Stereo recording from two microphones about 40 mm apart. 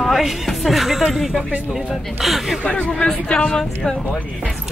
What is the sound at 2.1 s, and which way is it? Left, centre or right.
Speech, centre.